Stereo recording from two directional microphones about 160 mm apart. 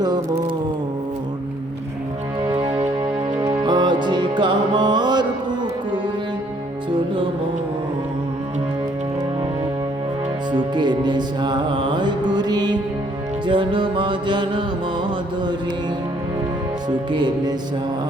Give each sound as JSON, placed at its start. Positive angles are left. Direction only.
{"t": 0.0, "sound": "music", "side_deg": -25}
{"t": 2.4, "sound": "music", "side_deg": -35}
{"t": 10.5, "sound": "music", "side_deg": -30}
{"t": 13.5, "sound": "mantra", "side_deg": -30}
{"t": 17.1, "sound": "music", "side_deg": -30}